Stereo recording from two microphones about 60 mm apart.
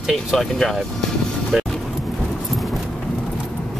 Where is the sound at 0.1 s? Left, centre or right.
Centre.